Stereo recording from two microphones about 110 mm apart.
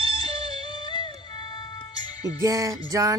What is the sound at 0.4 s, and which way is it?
Music, 45° left (ahead or behind).